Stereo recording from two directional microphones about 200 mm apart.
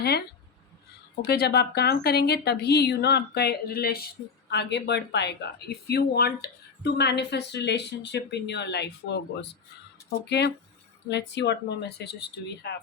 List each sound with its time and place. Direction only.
1.3 s speech: 55° left (ahead or behind)